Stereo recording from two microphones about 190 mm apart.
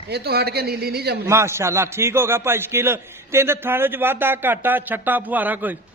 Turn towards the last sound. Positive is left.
turn(degrees=-10)  # may be behind; listen again after turning